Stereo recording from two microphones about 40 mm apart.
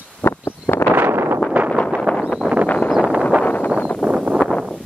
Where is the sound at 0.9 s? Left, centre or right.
Right.